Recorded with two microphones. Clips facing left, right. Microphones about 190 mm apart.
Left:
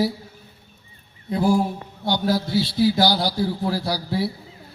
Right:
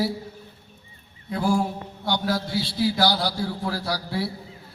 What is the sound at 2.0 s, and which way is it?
Speech, 25° left (ahead or behind).